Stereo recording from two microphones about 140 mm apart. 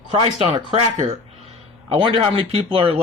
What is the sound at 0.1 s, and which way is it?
Speech, 45° right (ahead or behind).